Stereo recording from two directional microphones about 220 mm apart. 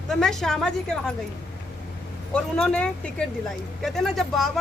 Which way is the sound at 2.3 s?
5° left (ahead or behind).